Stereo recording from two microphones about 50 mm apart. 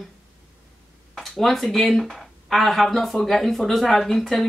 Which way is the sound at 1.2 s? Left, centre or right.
Centre.